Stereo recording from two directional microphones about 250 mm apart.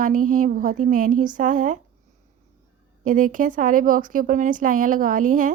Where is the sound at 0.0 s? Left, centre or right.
Right.